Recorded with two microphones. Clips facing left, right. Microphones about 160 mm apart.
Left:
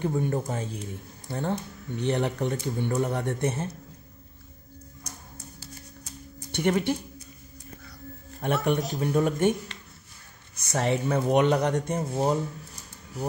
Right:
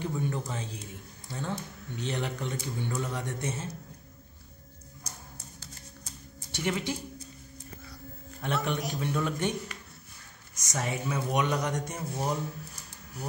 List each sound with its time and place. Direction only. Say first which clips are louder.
0.0 s speech: left 6 dB; 50° left (ahead or behind)
6.5 s speech: left 7 dB; 60° left (ahead or behind)
8.4 s speech: left 6 dB; 45° left (ahead or behind)
10.5 s speech: left 7 dB; 60° left (ahead or behind)